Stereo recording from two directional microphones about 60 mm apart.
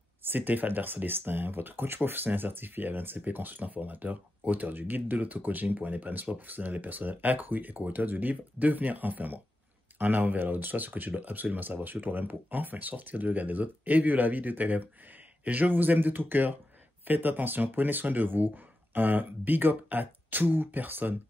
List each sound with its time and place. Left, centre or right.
0.2 s speech: right